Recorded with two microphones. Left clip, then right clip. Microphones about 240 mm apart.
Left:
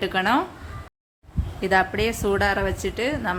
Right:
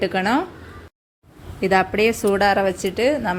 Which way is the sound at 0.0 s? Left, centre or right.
Centre.